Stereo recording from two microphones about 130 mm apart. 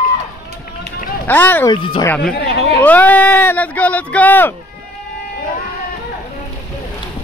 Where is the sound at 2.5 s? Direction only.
50° right (ahead or behind).